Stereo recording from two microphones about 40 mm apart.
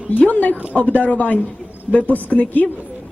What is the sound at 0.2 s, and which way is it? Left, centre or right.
A woman's voice, left.